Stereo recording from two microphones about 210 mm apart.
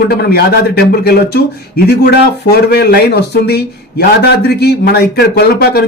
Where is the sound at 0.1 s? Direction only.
50° left (ahead or behind).